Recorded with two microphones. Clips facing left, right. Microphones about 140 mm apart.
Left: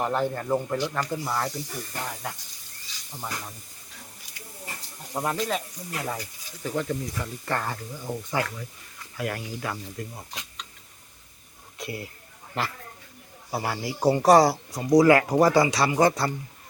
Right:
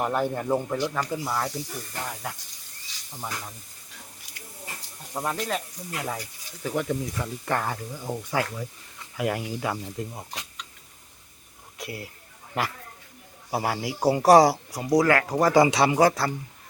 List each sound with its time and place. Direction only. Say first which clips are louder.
0.0 s speech: even; 10° right (ahead or behind)
5.1 s speech: left 1 dB; 5° left (ahead or behind); by 10.4 s 20° right (ahead or behind)
11.8 s speech: left 2 dB; centre (ahead or behind)
15.0 s speech: left 4 dB; 10° left (ahead or behind)
15.5 s speech: right 3 dB; 20° right (ahead or behind)
16.0 s speech: left 2 dB; 5° right (ahead or behind)